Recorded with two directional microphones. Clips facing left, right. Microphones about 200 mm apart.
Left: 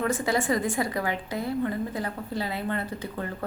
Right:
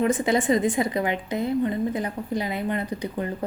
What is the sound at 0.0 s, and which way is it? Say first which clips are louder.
A woman's voice: right 4 dB; 20° right (ahead or behind).